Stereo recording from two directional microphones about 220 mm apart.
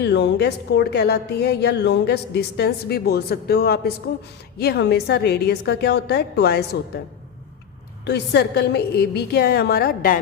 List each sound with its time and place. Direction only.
0.0 s a woman's voice: 50° left (ahead or behind)
8.0 s a woman's voice: 50° left (ahead or behind)